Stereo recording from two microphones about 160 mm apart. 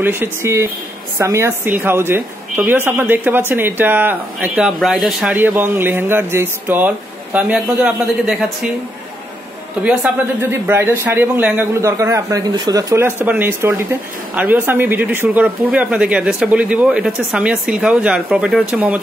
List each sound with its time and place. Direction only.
0.0 s a woman's voice: 15° right (ahead or behind)
10.7 s a woman's voice: 15° right (ahead or behind)